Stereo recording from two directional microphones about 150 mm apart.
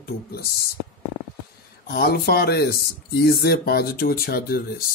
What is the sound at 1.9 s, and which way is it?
Speech, 90° left.